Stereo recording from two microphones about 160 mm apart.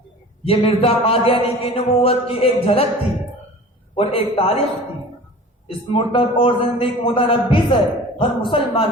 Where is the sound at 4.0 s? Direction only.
35° left (ahead or behind).